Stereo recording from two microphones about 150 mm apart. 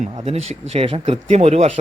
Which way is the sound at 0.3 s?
45° right (ahead or behind).